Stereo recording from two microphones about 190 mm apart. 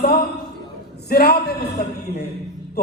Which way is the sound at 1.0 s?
55° left (ahead or behind).